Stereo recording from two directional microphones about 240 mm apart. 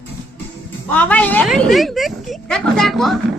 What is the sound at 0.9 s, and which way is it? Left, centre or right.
A woman's voice, centre.